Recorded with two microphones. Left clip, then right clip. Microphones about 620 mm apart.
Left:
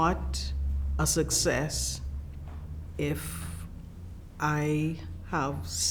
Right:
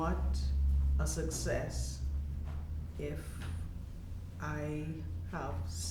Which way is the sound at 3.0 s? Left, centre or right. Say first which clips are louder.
Left 10 dB; left.